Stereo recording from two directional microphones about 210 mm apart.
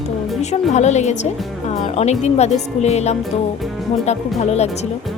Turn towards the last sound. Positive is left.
turn(degrees=30)  # may be behind; listen again after turning